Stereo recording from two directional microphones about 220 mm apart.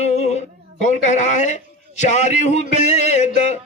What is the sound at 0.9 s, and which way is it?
Speech, 35° left (ahead or behind).